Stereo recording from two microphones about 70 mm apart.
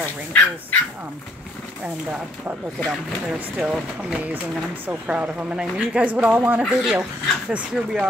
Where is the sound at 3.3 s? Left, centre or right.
Centre.